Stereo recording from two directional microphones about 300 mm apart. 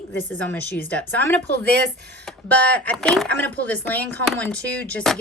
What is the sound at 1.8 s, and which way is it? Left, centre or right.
Speech, right.